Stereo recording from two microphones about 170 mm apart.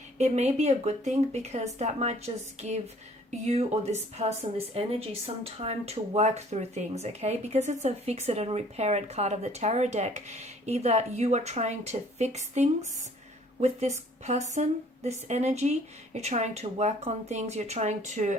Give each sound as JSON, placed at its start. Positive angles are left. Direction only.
{"t": 0.2, "sound": "speech", "side_deg": -40}